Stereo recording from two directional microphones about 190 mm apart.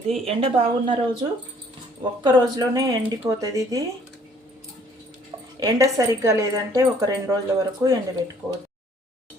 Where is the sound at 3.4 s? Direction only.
15° right (ahead or behind).